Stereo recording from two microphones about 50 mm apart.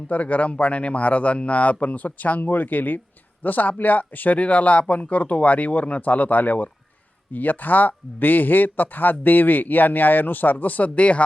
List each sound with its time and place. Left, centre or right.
0.1 s speech: left